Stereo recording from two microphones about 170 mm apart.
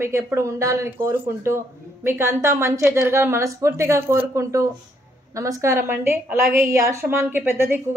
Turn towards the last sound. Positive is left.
turn(degrees=-15)  # may be behind; listen again after turning